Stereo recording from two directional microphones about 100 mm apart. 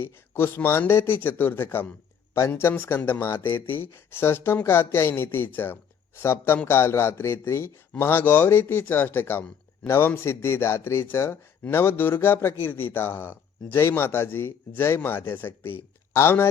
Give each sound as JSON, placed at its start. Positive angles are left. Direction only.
{"t": 0.0, "sound": "a man's voice", "side_deg": 25}